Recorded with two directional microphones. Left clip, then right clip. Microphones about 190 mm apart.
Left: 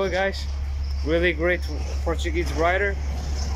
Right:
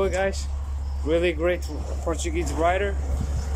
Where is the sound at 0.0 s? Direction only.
5° right (ahead or behind).